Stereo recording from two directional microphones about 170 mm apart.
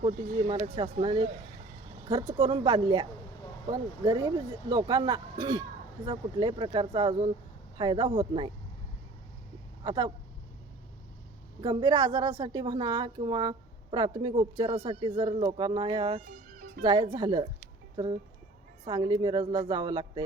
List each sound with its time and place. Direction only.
0.0 s a woman's voice: 45° right (ahead or behind); by 8.5 s 30° right (ahead or behind)
9.8 s speech: 25° right (ahead or behind)
11.6 s a woman's voice: 25° right (ahead or behind)